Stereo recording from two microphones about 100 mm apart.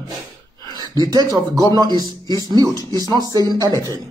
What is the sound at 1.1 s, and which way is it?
A man's voice, 40° right (ahead or behind).